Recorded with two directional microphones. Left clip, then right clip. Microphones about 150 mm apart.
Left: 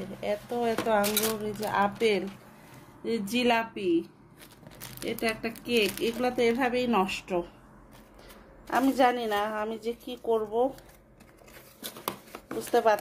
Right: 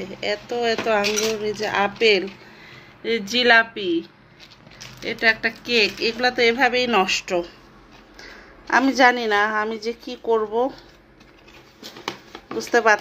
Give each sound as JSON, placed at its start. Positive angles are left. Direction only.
{"t": 0.2, "sound": "speech", "side_deg": 5}
{"t": 3.7, "sound": "a woman's voice", "side_deg": -60}
{"t": 5.0, "sound": "a woman's voice", "side_deg": 10}
{"t": 12.4, "sound": "speech", "side_deg": 15}